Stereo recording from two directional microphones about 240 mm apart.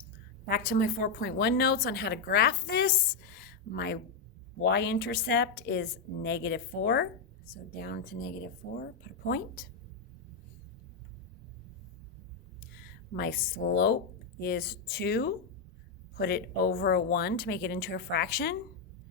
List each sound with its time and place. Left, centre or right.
0.4 s a woman's voice: left
13.1 s a woman's voice: left